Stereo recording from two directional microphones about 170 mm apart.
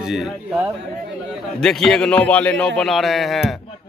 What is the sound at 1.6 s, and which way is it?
A man's voice, centre (ahead or behind).